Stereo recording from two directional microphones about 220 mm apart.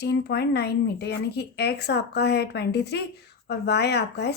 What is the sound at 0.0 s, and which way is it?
A woman's voice, 50° left (ahead or behind).